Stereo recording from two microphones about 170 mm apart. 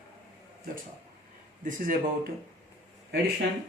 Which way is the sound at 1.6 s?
55° right (ahead or behind).